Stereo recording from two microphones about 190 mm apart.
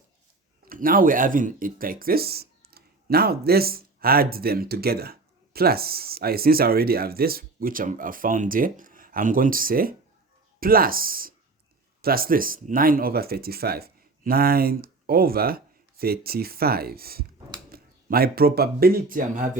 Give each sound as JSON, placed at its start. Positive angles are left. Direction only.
{"t": 0.6, "sound": "speech", "side_deg": -50}